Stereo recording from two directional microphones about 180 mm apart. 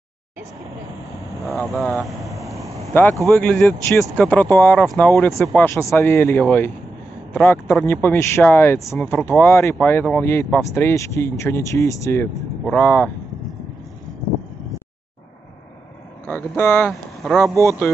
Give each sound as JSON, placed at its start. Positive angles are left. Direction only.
{"t": 1.4, "sound": "speech", "side_deg": -15}
{"t": 2.2, "sound": "vehicle", "side_deg": -15}
{"t": 2.9, "sound": "speech", "side_deg": 10}
{"t": 16.3, "sound": "speech", "side_deg": 10}
{"t": 16.9, "sound": "speech", "side_deg": 0}
{"t": 17.6, "sound": "speech", "side_deg": 15}